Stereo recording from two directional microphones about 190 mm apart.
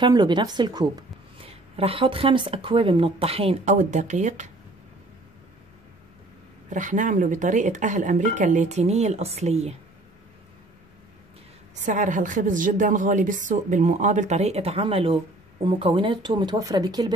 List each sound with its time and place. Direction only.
0.0 s a woman's voice: 25° right (ahead or behind); by 4.5 s 40° right (ahead or behind)
6.7 s a woman's voice: 40° right (ahead or behind)
11.8 s a woman's voice: 40° right (ahead or behind); by 17.1 s 20° right (ahead or behind)